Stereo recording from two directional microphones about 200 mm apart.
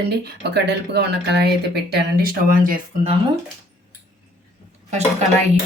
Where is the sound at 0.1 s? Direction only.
55° right (ahead or behind).